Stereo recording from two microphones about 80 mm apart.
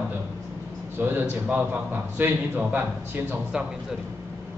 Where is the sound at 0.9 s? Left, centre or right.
Right.